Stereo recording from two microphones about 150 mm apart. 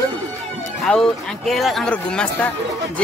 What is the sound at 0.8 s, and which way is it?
Speech, 5° left (ahead or behind).